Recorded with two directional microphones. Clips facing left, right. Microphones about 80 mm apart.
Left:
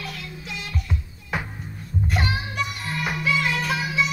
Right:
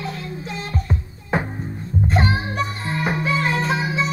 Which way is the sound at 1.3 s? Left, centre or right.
Right.